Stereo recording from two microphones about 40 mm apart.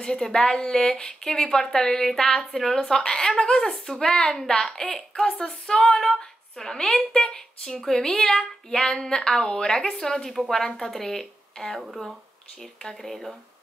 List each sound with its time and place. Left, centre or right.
0.0 s child singing: centre
8.1 s a woman's voice: left
8.4 s child singing: centre
12.8 s child singing: centre